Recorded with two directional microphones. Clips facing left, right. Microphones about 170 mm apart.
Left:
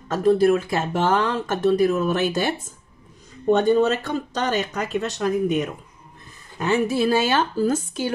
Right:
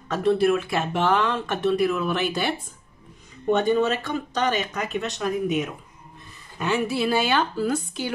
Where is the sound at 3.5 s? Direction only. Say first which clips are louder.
Left 3 dB; 40° left (ahead or behind).